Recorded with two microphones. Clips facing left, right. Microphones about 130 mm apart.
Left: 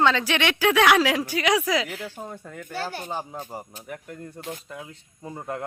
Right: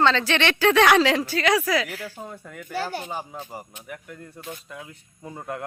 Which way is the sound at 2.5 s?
10° right (ahead or behind).